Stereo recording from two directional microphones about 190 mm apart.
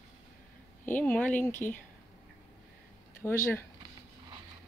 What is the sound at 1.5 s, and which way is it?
Speech, 45° left (ahead or behind).